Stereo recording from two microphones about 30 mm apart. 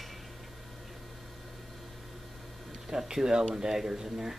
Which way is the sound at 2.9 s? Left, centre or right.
Centre.